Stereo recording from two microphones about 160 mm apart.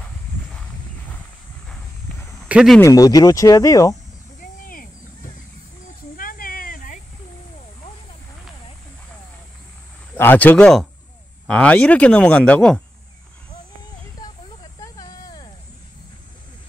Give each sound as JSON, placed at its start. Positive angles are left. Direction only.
{"t": 2.4, "sound": "speech", "side_deg": -5}
{"t": 2.8, "sound": "speech", "side_deg": 20}
{"t": 4.4, "sound": "cricket", "side_deg": 60}
{"t": 6.1, "sound": "a sound", "side_deg": 60}
{"t": 10.1, "sound": "speech", "side_deg": 10}
{"t": 14.8, "sound": "a sound", "side_deg": 25}